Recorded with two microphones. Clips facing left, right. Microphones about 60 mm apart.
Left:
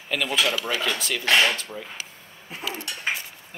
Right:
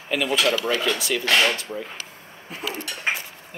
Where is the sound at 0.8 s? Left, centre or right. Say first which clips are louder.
Right 3 dB; centre.